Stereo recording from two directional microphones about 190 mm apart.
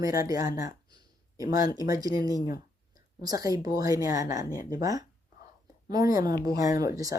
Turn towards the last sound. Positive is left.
turn(degrees=-20)  # may be behind; listen again after turning